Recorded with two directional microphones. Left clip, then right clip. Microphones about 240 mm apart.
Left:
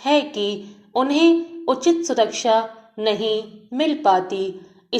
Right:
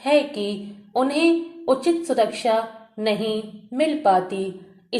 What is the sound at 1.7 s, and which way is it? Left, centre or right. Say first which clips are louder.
A woman's voice: left 1 dB; centre.